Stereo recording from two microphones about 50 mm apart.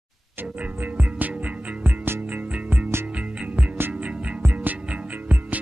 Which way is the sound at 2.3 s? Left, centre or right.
Right.